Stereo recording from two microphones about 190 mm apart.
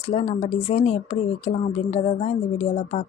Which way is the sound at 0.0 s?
35° left (ahead or behind).